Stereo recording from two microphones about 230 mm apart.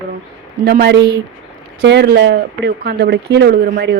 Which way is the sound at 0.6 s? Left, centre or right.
Right.